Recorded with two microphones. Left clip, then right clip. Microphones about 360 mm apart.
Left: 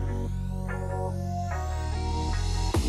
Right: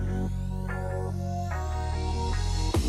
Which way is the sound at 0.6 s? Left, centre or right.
Centre.